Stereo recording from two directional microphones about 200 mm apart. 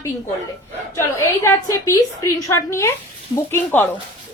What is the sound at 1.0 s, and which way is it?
A woman's voice, 10° left (ahead or behind).